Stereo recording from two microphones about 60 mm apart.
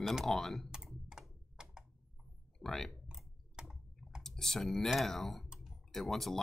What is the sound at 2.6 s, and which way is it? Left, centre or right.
Speech, centre.